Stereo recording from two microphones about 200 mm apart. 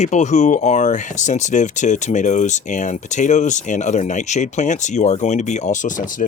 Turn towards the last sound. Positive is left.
turn(degrees=40)  # may be behind; listen again after turning